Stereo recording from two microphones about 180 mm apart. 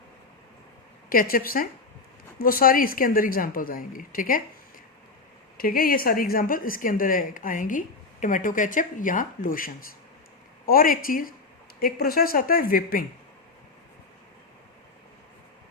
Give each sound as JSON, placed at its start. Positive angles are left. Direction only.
{"t": 1.1, "sound": "speech", "side_deg": 55}
{"t": 5.5, "sound": "speech", "side_deg": 55}